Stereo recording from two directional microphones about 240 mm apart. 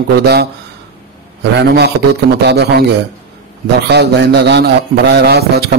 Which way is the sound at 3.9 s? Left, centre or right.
Right.